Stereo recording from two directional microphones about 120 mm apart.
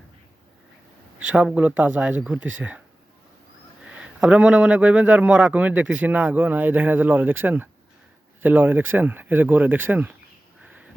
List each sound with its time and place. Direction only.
1.3 s speech: 10° right (ahead or behind)
3.8 s speech: 5° right (ahead or behind)
10.6 s bird: 10° right (ahead or behind)